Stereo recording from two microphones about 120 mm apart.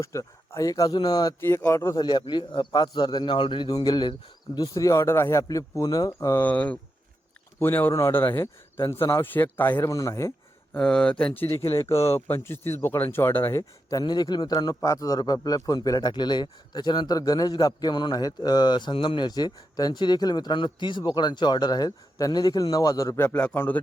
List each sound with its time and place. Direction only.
0.0 s speech: 25° left (ahead or behind)
2.0 s speech: 35° left (ahead or behind)
6.4 s speech: 10° left (ahead or behind)
9.9 s speech: 25° left (ahead or behind)
10.8 s speech: 10° left (ahead or behind)
11.8 s speech: 25° left (ahead or behind)